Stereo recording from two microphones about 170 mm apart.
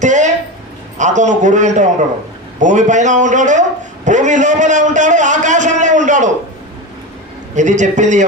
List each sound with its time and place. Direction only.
0.0 s a sound: 45° right (ahead or behind)
0.9 s a man's voice: 45° right (ahead or behind)
7.5 s a man's voice: 45° right (ahead or behind)